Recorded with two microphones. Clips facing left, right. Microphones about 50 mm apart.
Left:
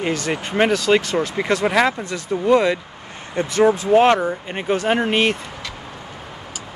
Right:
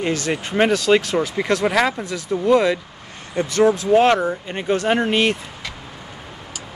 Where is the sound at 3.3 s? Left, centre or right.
Centre.